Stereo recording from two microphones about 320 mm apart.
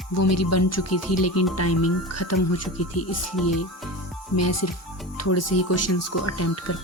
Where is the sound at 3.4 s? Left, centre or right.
Centre.